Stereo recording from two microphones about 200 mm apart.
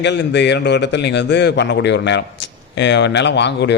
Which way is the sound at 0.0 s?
60° left (ahead or behind).